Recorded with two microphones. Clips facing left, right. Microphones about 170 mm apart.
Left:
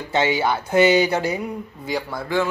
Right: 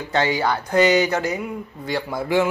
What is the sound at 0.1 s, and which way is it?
Speech, 20° left (ahead or behind).